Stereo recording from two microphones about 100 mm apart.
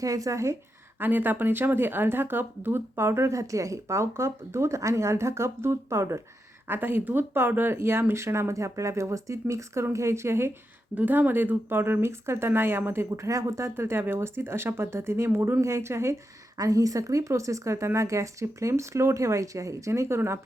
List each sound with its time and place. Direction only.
0.0 s speech: 35° right (ahead or behind)
0.9 s speech: 20° right (ahead or behind)